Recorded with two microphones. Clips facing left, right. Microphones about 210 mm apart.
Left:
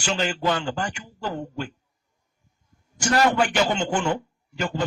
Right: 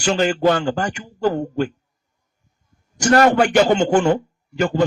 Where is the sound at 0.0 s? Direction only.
45° right (ahead or behind).